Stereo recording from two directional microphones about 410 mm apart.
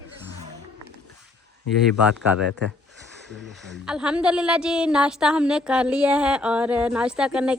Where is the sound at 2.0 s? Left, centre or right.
Centre.